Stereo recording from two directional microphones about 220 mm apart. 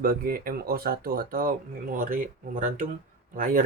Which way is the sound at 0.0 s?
40° right (ahead or behind).